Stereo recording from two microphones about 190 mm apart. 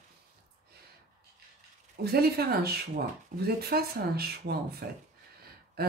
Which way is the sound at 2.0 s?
55° right (ahead or behind).